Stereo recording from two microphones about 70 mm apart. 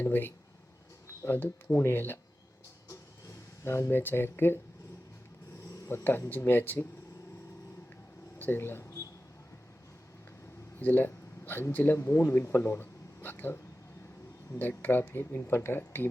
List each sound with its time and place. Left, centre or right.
0.0 s speech: left
2.9 s a sound: left
6.1 s speech: left
8.4 s speech: left
10.8 s speech: left
14.6 s speech: left